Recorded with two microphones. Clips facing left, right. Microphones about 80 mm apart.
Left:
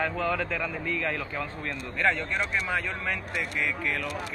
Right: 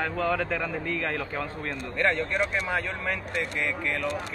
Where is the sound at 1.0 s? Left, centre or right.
Right.